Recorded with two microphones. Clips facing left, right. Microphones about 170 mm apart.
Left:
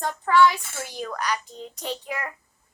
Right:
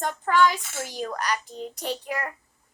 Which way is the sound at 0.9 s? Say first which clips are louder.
Even; 40° right (ahead or behind).